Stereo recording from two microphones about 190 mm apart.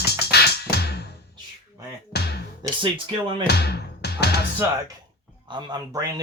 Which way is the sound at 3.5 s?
60° left (ahead or behind).